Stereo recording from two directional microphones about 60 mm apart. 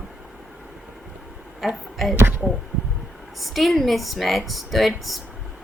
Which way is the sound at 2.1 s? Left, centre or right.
Right.